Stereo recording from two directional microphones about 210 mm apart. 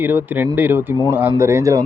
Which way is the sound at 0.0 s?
10° right (ahead or behind).